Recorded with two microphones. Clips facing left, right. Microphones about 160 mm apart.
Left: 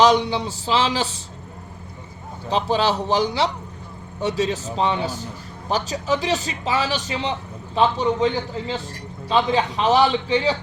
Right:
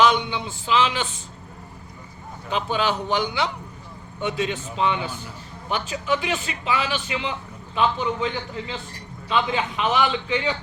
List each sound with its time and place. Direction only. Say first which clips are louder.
0.0 s a man's voice: left 3 dB; 35° left (ahead or behind)
2.5 s a man's voice: left 4 dB; 35° left (ahead or behind)